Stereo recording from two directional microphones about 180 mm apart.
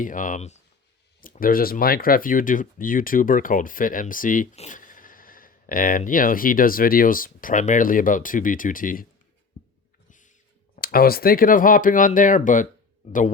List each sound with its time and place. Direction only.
0.0 s speech: 45° left (ahead or behind)
1.2 s speech: 50° left (ahead or behind)
10.1 s rodents: 45° left (ahead or behind)
10.8 s speech: 55° left (ahead or behind)
13.0 s speech: 35° left (ahead or behind)